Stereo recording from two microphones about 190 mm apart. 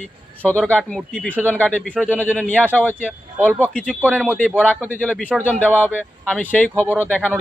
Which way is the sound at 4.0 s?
10° right (ahead or behind).